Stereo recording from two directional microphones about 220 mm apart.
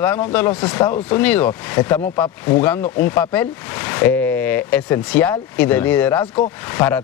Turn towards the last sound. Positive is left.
turn(degrees=10)  # may be behind; listen again after turning